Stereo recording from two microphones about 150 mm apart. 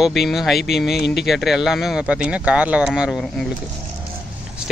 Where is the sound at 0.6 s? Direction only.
90° left.